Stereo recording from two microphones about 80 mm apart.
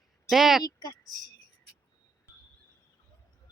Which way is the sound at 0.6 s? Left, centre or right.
Left.